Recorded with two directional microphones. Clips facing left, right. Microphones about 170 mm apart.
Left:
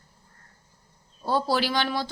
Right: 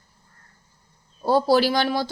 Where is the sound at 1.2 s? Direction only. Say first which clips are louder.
Right 7 dB; 40° right (ahead or behind).